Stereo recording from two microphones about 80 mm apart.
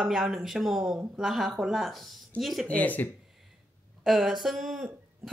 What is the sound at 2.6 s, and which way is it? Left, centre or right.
Speech, centre.